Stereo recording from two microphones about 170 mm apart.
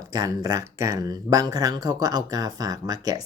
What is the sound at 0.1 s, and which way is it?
Speech, 20° right (ahead or behind).